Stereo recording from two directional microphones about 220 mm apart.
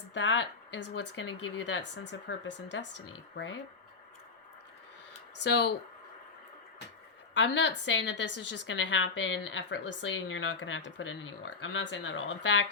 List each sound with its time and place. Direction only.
0.1 s a woman's voice: 55° left (ahead or behind); by 2.0 s 75° left (ahead or behind)
2.0 s a woman's voice: 55° left (ahead or behind)
5.4 s speech: 50° left (ahead or behind)
7.3 s a woman's voice: 55° left (ahead or behind)